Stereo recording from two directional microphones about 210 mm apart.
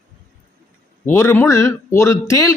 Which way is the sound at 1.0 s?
10° left (ahead or behind).